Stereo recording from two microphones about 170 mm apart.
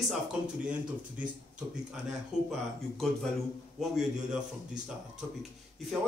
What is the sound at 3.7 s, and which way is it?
Speech, centre (ahead or behind).